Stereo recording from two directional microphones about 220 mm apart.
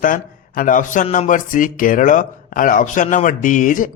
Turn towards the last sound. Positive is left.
turn(degrees=35)  # may be behind; listen again after turning